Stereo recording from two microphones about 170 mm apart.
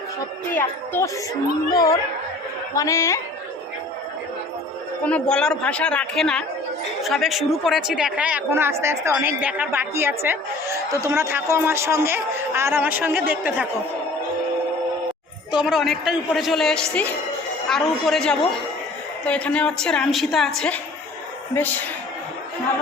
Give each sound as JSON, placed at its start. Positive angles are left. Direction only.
{"t": 0.5, "sound": "speech", "side_deg": 15}
{"t": 5.0, "sound": "speech", "side_deg": 5}
{"t": 15.5, "sound": "speech", "side_deg": -5}